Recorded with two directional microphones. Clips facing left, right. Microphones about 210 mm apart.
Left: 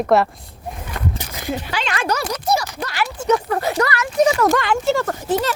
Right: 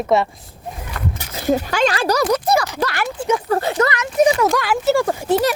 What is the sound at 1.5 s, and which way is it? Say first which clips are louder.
Speech: right 8 dB; 40° right (ahead or behind).